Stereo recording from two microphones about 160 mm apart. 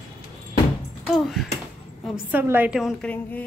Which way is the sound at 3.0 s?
5° left (ahead or behind).